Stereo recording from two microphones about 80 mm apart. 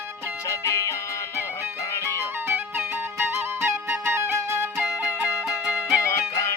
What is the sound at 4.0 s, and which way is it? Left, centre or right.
Music, right.